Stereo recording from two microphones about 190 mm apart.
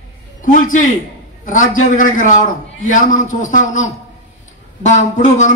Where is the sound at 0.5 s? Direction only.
45° left (ahead or behind).